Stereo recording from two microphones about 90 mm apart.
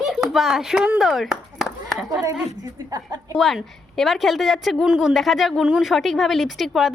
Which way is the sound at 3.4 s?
Centre (ahead or behind).